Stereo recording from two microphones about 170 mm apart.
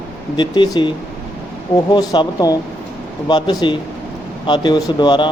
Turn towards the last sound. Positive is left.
turn(degrees=25)  # may be behind; listen again after turning